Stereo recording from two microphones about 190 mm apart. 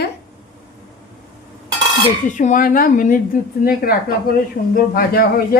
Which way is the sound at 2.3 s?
40° left (ahead or behind).